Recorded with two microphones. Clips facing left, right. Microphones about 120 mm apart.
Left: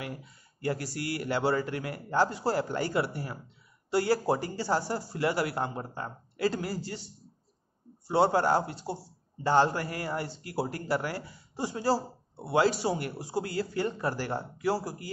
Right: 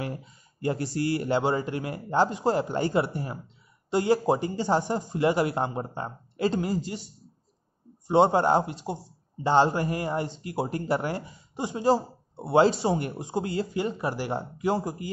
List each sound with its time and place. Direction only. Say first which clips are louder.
0.0 s a man's voice: right 5 dB; 25° right (ahead or behind)